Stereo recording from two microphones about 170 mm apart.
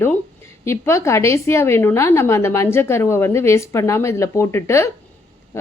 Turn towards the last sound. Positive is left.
turn(degrees=15)  # may be behind; listen again after turning